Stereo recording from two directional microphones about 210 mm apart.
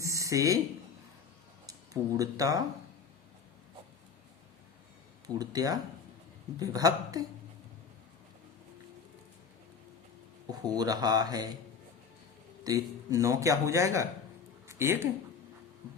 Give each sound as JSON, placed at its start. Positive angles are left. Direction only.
{"t": 0.0, "sound": "a sound", "side_deg": -15}
{"t": 1.6, "sound": "speech", "side_deg": -15}
{"t": 5.2, "sound": "speech", "side_deg": -20}
{"t": 10.5, "sound": "speech", "side_deg": -20}
{"t": 12.6, "sound": "speech", "side_deg": -15}